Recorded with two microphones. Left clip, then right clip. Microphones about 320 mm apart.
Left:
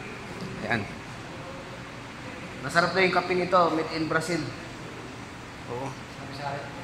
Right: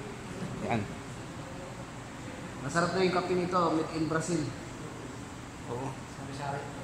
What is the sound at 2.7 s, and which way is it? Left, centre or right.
Speech, centre.